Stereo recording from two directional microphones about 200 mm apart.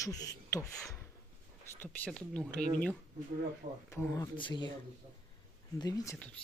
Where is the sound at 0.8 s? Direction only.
5° left (ahead or behind).